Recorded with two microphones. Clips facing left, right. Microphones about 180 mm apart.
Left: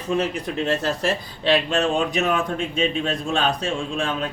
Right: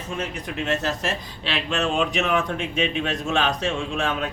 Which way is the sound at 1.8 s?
35° left (ahead or behind).